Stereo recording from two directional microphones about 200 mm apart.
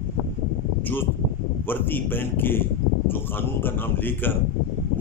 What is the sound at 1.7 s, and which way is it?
A man's voice, 10° left (ahead or behind).